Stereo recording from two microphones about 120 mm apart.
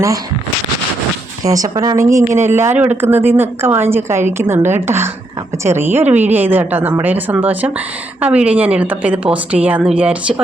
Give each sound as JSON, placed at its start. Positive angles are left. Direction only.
{"t": 1.5, "sound": "a woman's voice", "side_deg": -30}